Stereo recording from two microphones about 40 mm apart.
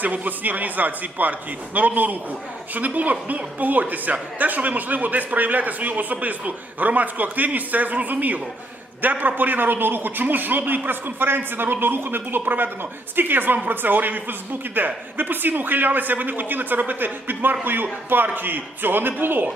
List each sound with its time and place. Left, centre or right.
0.0 s a man's voice: right